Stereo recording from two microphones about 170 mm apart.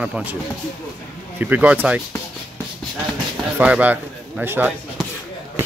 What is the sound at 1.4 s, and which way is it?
Speech, 10° right (ahead or behind).